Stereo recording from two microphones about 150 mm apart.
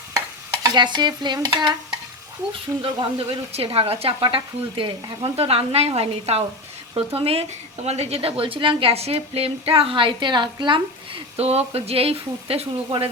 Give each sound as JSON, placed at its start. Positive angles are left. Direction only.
{"t": 0.6, "sound": "dishes", "side_deg": -30}
{"t": 2.5, "sound": "a woman's voice", "side_deg": -35}